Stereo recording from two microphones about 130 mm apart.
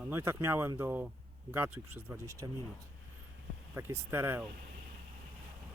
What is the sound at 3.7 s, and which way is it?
Speech, 20° right (ahead or behind).